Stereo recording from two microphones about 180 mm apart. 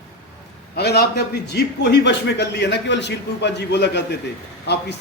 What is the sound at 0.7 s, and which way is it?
A man's voice, 65° left (ahead or behind).